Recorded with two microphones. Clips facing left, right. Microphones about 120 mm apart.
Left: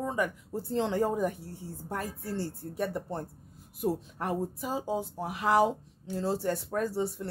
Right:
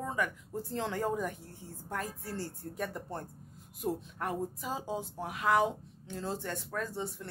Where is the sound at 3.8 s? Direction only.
30° left (ahead or behind).